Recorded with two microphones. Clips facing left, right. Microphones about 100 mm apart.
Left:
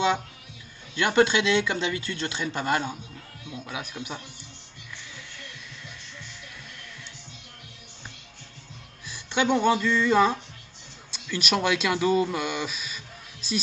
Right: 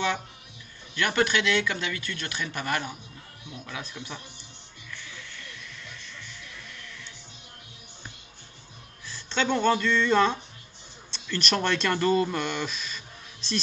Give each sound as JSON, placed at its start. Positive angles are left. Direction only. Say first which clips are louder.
{"t": 0.9, "sound": "speech", "louder": "left 4 dB", "side_deg": 20}
{"t": 9.0, "sound": "speech", "louder": "left 3 dB", "side_deg": 15}